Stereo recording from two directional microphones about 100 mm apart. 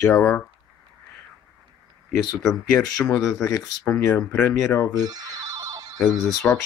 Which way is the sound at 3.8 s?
15° left (ahead or behind).